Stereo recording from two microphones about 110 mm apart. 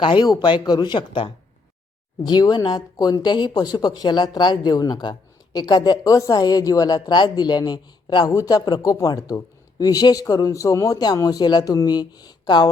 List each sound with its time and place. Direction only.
0.0 s a man's voice: 45° left (ahead or behind)